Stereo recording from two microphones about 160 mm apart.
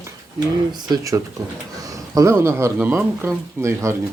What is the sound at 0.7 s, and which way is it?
Speech, 25° right (ahead or behind).